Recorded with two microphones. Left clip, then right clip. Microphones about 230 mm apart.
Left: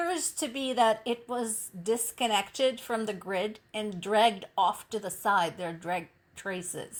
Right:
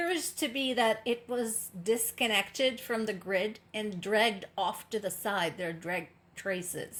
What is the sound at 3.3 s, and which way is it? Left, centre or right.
A woman's voice, left.